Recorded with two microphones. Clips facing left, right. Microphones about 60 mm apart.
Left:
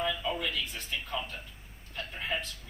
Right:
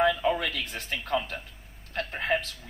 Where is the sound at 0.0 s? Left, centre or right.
Right.